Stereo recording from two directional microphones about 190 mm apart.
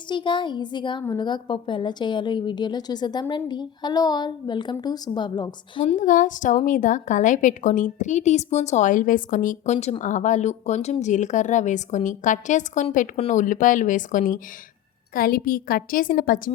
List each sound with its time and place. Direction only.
0.1 s a woman's voice: 25° left (ahead or behind)
5.8 s a woman's voice: 40° left (ahead or behind)